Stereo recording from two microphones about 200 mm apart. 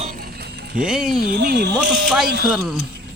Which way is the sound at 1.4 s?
55° right (ahead or behind).